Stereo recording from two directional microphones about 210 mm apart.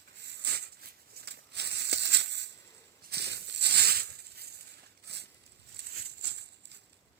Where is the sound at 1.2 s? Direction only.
50° right (ahead or behind).